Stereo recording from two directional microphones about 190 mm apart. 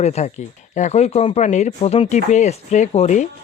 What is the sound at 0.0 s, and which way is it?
Speech, 35° left (ahead or behind).